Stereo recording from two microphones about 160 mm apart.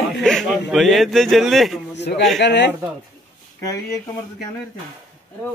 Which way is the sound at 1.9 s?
90° left.